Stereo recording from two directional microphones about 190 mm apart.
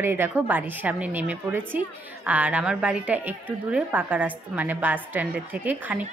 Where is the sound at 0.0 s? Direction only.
10° right (ahead or behind).